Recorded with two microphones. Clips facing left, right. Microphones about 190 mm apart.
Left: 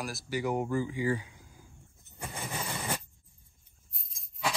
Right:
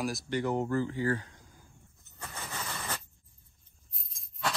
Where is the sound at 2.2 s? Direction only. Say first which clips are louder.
Left 3 dB; 10° left (ahead or behind).